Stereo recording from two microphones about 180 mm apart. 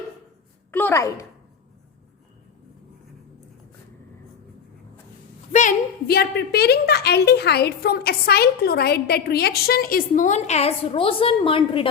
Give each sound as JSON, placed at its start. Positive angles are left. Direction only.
{"t": 0.7, "sound": "a woman's voice", "side_deg": 10}
{"t": 5.5, "sound": "a woman's voice", "side_deg": 45}